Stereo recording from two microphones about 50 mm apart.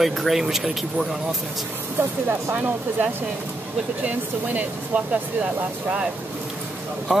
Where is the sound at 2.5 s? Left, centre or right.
Right.